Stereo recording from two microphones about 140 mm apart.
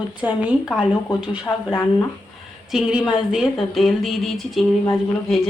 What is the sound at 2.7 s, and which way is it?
Speech, 5° right (ahead or behind).